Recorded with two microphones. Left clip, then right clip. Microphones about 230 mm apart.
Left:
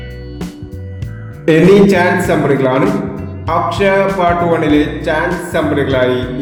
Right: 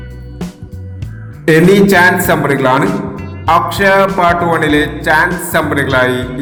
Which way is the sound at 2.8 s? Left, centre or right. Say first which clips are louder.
Even; centre.